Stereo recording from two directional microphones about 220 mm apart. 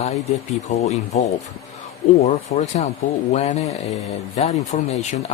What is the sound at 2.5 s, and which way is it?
Speech, 30° left (ahead or behind).